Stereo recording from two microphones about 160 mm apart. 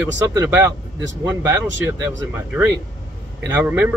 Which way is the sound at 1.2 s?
25° right (ahead or behind).